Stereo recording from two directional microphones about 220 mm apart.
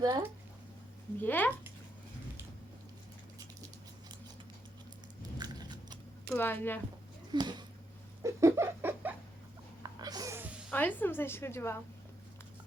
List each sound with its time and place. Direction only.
0.0 s speech: 15° right (ahead or behind)
1.2 s a woman's voice: 10° left (ahead or behind)
5.4 s biting: 20° right (ahead or behind)
6.3 s a woman's voice: 10° left (ahead or behind)
7.3 s a sound: 20° right (ahead or behind)
10.7 s a woman's voice: 10° left (ahead or behind)